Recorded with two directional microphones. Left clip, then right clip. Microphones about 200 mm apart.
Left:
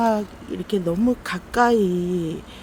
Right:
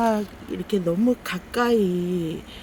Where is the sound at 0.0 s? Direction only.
Centre (ahead or behind).